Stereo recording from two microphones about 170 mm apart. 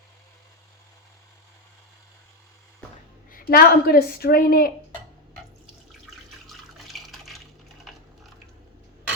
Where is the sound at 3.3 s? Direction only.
60° left (ahead or behind).